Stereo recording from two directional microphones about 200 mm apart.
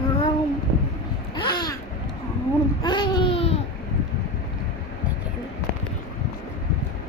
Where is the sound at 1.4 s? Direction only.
20° left (ahead or behind).